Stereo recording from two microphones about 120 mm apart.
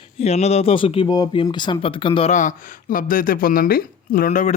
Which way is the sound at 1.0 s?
35° left (ahead or behind).